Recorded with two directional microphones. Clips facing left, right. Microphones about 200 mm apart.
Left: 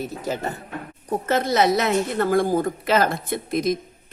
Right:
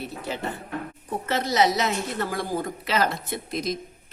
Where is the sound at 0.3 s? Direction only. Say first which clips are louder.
Left 5 dB; 40° left (ahead or behind).